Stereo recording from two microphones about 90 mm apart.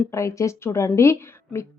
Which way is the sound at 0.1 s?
35° left (ahead or behind).